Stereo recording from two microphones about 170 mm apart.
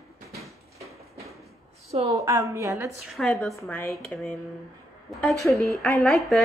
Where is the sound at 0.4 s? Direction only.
20° right (ahead or behind).